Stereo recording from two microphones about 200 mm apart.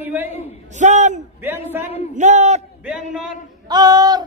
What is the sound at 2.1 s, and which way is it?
Speech, 35° right (ahead or behind).